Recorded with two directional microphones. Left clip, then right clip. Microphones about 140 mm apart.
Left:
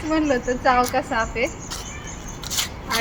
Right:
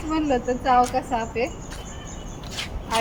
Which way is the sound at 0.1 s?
20° right (ahead or behind).